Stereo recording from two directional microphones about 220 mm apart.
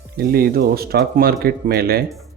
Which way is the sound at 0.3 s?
45° right (ahead or behind).